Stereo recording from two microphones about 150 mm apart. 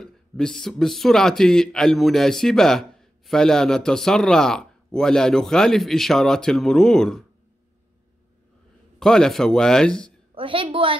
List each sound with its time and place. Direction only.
0.0 s speech: 5° left (ahead or behind)
9.0 s speech: 5° left (ahead or behind)
10.3 s a woman's voice: 35° right (ahead or behind)